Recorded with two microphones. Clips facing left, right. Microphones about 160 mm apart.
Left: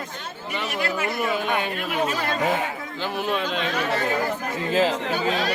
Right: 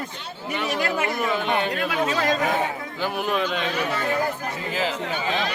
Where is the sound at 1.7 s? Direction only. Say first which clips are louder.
Right 1 dB; 90° right.